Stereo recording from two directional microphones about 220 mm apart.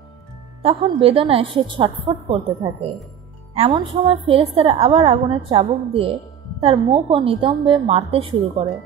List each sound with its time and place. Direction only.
0.6 s a woman's voice: 25° right (ahead or behind)